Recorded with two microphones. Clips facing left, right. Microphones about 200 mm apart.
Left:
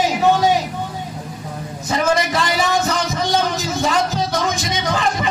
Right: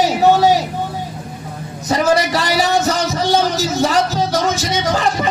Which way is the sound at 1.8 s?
40° right (ahead or behind).